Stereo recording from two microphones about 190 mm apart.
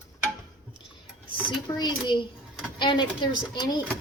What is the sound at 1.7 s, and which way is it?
A woman's voice, 20° left (ahead or behind).